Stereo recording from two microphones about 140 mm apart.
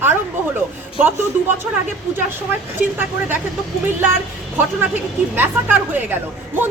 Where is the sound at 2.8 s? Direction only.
15° right (ahead or behind).